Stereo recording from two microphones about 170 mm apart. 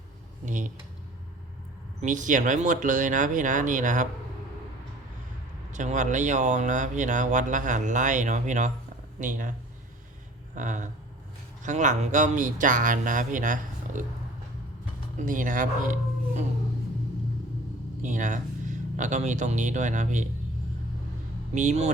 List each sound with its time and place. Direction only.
0.4 s speech: 50° right (ahead or behind)
2.0 s speech: 45° right (ahead or behind)
5.7 s speech: 45° right (ahead or behind)
10.5 s speech: 45° right (ahead or behind)
15.2 s speech: 50° right (ahead or behind)
18.0 s speech: 50° right (ahead or behind)
21.5 s speech: 45° right (ahead or behind)